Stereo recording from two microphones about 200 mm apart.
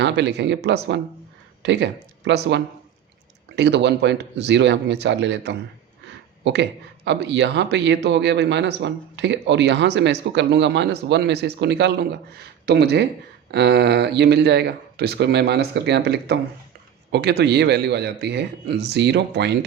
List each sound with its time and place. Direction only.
0.0 s a man's voice: 60° right (ahead or behind)